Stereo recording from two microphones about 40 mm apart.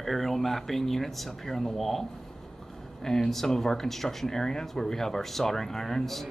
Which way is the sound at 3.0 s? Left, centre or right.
Centre.